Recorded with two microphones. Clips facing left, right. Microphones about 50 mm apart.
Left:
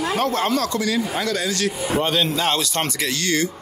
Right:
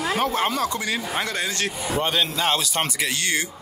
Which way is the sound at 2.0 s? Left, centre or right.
Centre.